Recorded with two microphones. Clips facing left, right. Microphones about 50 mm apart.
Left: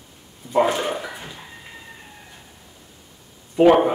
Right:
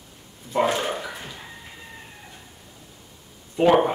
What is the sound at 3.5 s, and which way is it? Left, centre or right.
Speech, centre.